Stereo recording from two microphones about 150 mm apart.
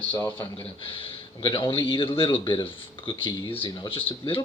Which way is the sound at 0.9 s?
35° left (ahead or behind).